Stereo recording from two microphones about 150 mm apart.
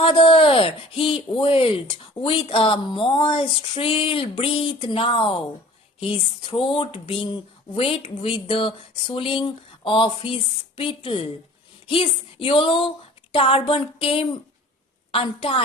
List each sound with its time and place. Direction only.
0.0 s speech: 35° left (ahead or behind)